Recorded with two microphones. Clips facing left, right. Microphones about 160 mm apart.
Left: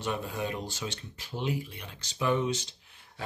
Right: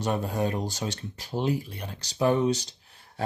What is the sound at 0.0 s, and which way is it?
Speech, 40° right (ahead or behind).